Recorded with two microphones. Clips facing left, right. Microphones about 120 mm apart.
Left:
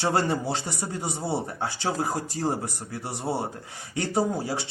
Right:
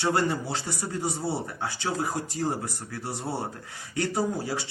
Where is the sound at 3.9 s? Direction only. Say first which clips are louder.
Left 2 dB; 25° left (ahead or behind).